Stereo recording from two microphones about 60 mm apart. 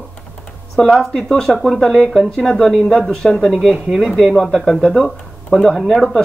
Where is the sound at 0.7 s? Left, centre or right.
Centre.